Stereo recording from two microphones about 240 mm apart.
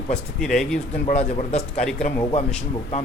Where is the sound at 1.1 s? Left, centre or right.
Left.